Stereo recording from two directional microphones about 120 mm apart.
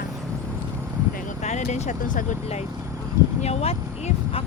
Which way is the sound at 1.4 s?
75° left (ahead or behind).